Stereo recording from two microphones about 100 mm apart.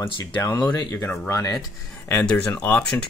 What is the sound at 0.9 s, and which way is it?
Speech, 30° left (ahead or behind).